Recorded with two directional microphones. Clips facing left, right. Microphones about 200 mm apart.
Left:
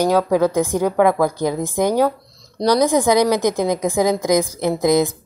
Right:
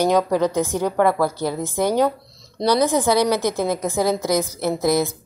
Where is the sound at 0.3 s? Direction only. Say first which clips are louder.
Left 3 dB; 10° left (ahead or behind).